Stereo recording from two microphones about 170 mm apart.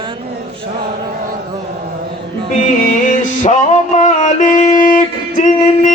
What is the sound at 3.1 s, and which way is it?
Music, 45° left (ahead or behind).